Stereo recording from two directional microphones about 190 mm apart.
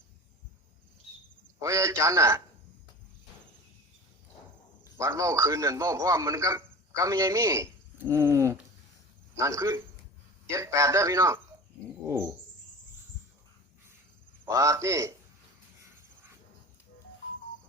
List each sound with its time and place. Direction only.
1.5 s a man's voice: 15° right (ahead or behind)
4.8 s a man's voice: 15° right (ahead or behind)
14.4 s a man's voice: 15° right (ahead or behind)